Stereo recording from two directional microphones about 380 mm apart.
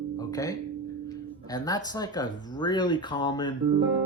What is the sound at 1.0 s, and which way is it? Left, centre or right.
Speech, centre.